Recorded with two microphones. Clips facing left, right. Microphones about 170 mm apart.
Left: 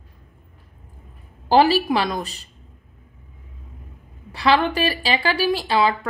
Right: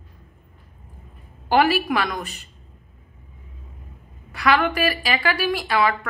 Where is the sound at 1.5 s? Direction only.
30° left (ahead or behind).